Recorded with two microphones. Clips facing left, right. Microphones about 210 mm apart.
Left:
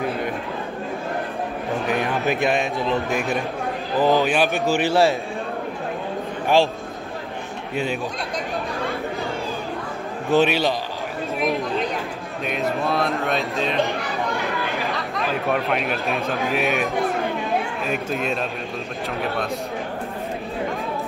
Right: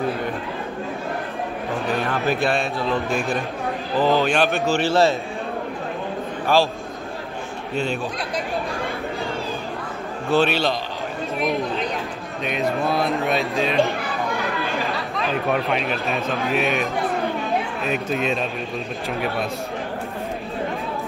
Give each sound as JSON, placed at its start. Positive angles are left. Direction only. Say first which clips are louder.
{"t": 1.9, "sound": "a man's voice", "louder": "even", "side_deg": 15}
{"t": 6.4, "sound": "a man's voice", "louder": "left 1 dB", "side_deg": 20}
{"t": 7.7, "sound": "a man's voice", "louder": "even", "side_deg": 15}
{"t": 10.3, "sound": "a man's voice", "louder": "left 1 dB", "side_deg": 15}
{"t": 12.4, "sound": "speech", "louder": "right 1 dB", "side_deg": 0}
{"t": 15.1, "sound": "speech", "louder": "right 1 dB", "side_deg": 0}
{"t": 18.1, "sound": "speech", "louder": "right 3 dB", "side_deg": 0}